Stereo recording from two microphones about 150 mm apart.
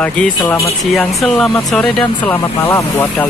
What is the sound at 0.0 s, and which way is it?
Speech, 10° left (ahead or behind).